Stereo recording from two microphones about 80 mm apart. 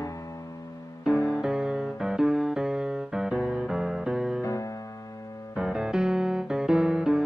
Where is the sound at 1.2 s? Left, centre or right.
Centre.